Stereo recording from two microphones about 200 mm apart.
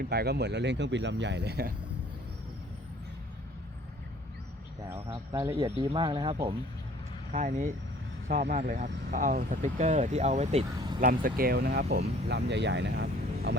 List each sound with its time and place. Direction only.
0.0 s speech: 50° right (ahead or behind)
5.0 s speech: 20° right (ahead or behind)
5.7 s speech: 25° right (ahead or behind)
7.3 s speech: 35° right (ahead or behind)
8.3 s speech: 50° right (ahead or behind)
8.5 s speech: 40° right (ahead or behind)
11.0 s speech: 45° right (ahead or behind)